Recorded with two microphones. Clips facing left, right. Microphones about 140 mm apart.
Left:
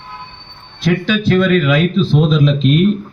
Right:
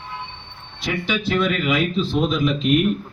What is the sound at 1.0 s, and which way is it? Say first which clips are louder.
A man's voice: left 6 dB; 70° left (ahead or behind).